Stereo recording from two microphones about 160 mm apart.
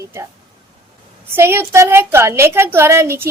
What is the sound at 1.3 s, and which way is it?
A woman's voice, 15° right (ahead or behind).